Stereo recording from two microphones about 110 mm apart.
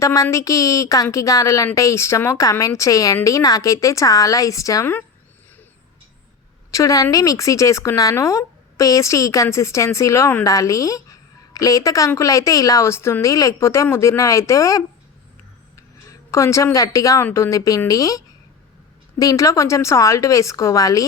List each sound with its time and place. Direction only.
0.0 s a woman's voice: 30° left (ahead or behind)
6.7 s a woman's voice: 30° left (ahead or behind)
16.3 s a woman's voice: 25° left (ahead or behind)
19.2 s a woman's voice: 30° left (ahead or behind)